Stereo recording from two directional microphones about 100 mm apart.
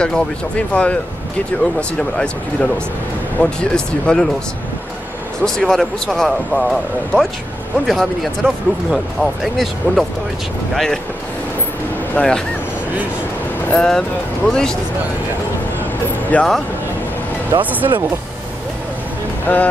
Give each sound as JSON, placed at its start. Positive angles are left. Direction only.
{"t": 0.0, "sound": "speech", "side_deg": 10}
{"t": 5.4, "sound": "speech", "side_deg": 5}
{"t": 12.2, "sound": "speech", "side_deg": 15}
{"t": 13.7, "sound": "speech", "side_deg": 5}
{"t": 16.3, "sound": "speech", "side_deg": 15}
{"t": 17.5, "sound": "speech", "side_deg": -50}
{"t": 19.4, "sound": "speech", "side_deg": 15}